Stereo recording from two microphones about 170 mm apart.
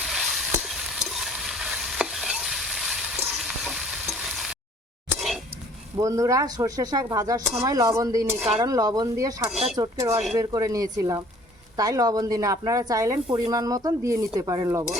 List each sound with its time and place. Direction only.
0.0 s sizzle: centre (ahead or behind)
6.0 s speech: 20° right (ahead or behind)
9.5 s speech: centre (ahead or behind)
9.7 s speech: 20° right (ahead or behind)